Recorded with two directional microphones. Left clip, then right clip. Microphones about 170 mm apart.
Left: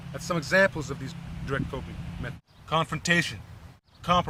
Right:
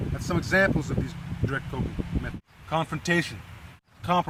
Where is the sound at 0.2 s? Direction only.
30° left (ahead or behind).